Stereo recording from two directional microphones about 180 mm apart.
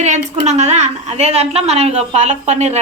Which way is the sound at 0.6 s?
40° right (ahead or behind).